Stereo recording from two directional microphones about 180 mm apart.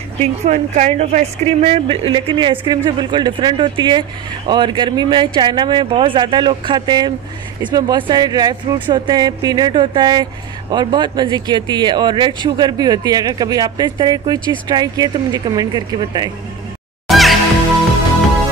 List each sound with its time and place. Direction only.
0.2 s speech: 40° right (ahead or behind); by 16.3 s 20° right (ahead or behind)
17.1 s music: centre (ahead or behind)